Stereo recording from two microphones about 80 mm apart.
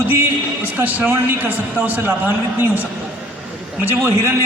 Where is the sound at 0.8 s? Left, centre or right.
Right.